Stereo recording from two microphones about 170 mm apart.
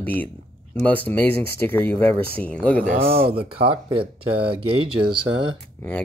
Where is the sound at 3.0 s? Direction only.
35° right (ahead or behind).